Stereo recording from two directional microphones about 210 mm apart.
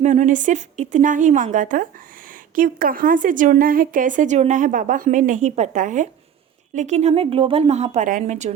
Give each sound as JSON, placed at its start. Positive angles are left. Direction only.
{"t": 0.0, "sound": "a woman's voice", "side_deg": -35}